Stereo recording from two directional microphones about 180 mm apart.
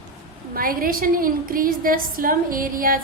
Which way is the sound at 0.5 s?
50° right (ahead or behind).